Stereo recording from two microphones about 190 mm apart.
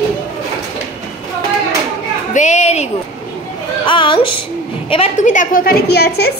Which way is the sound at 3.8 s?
25° left (ahead or behind).